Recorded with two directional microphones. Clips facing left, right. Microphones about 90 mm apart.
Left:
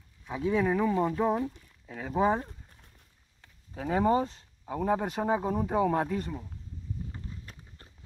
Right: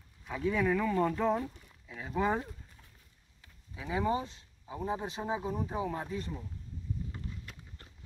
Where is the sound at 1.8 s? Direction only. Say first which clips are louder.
Left 5 dB; 45° left (ahead or behind).